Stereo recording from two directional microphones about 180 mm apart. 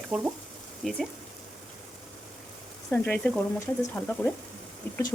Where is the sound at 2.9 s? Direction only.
10° left (ahead or behind).